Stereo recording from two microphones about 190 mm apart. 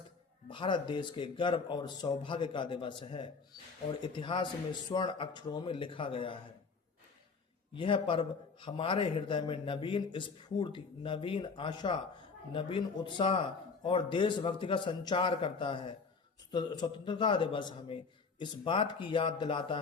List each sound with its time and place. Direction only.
0.4 s a man's voice: 25° left (ahead or behind)
7.7 s a man's voice: 25° left (ahead or behind)